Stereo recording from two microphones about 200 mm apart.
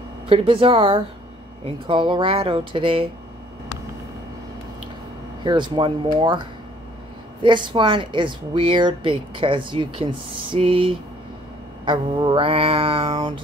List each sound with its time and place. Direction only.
0.3 s speech: 25° right (ahead or behind)
5.4 s speech: 25° right (ahead or behind)
7.4 s speech: 25° right (ahead or behind)